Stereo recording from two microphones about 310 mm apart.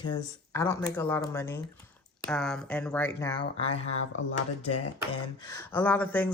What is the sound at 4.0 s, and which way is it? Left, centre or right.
Speech, left.